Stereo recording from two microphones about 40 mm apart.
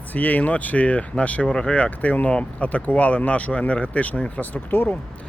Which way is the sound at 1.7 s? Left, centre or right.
Left.